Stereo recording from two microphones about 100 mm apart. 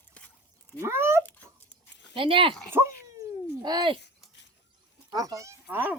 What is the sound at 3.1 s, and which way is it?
Cat, 40° right (ahead or behind).